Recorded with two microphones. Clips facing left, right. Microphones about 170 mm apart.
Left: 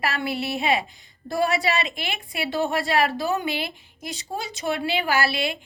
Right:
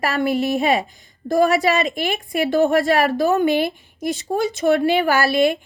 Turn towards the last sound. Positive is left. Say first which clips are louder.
# right 7 dB
turn(degrees=-50)  # may be behind; listen again after turning